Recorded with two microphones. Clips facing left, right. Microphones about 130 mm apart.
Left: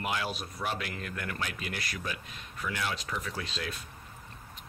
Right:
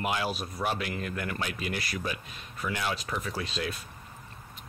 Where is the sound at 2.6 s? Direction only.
20° right (ahead or behind).